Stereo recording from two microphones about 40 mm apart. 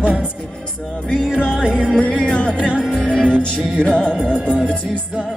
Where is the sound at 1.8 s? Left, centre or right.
Left.